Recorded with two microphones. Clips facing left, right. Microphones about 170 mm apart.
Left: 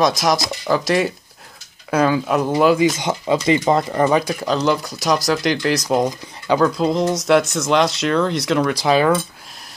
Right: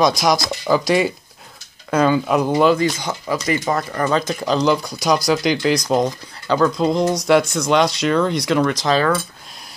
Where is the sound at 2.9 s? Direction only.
20° left (ahead or behind).